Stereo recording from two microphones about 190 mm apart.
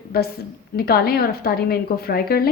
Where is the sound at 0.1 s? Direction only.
55° left (ahead or behind).